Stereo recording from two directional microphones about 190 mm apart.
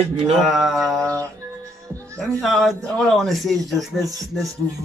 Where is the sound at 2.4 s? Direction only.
Centre (ahead or behind).